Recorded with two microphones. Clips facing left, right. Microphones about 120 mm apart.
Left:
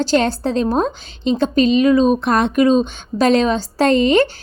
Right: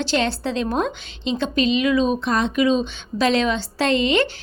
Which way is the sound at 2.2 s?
55° left (ahead or behind).